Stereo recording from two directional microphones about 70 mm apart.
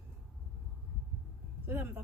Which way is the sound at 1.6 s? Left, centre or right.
Right.